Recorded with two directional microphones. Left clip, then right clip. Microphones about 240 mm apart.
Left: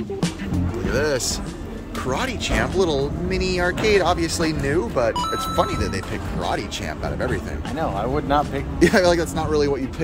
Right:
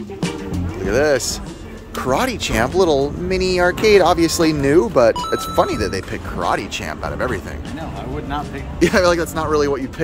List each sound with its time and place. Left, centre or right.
0.8 s speech: centre
2.0 s speech: right
8.7 s speech: centre